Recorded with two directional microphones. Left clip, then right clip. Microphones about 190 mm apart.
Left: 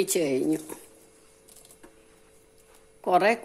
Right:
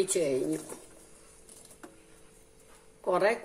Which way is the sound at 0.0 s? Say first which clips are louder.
Left 3 dB; 45° left (ahead or behind).